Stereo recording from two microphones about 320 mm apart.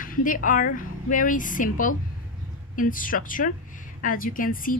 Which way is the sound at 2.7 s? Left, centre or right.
Left.